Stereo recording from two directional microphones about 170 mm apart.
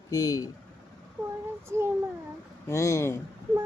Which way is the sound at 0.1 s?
20° left (ahead or behind).